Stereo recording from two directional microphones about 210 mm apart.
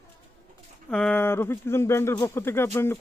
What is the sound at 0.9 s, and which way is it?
Speech, 5° left (ahead or behind).